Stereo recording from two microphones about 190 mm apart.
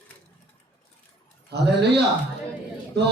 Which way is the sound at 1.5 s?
60° right (ahead or behind).